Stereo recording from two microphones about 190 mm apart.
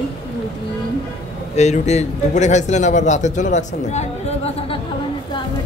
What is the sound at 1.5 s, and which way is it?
A man's voice, 35° left (ahead or behind).